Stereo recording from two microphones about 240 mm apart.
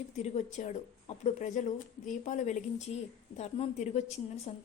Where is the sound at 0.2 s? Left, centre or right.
Left.